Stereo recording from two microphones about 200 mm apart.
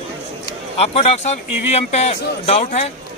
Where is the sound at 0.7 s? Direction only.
30° left (ahead or behind).